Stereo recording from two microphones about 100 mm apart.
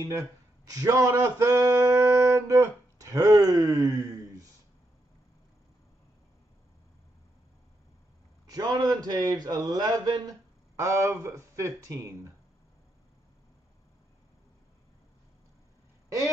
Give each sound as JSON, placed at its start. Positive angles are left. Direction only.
{"t": 0.7, "sound": "a sound", "side_deg": -35}
{"t": 8.5, "sound": "a man's voice", "side_deg": -40}
{"t": 10.8, "sound": "speech", "side_deg": -30}